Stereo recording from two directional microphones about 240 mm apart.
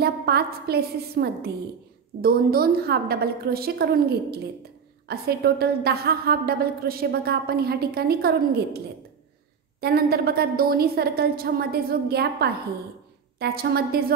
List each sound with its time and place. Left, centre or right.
0.0 s a woman's voice: right
9.8 s a woman's voice: right